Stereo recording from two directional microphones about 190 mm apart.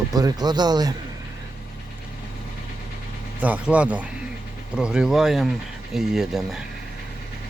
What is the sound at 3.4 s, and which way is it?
Speech, 10° right (ahead or behind).